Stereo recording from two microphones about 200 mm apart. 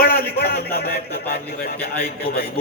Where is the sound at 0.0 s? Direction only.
50° left (ahead or behind).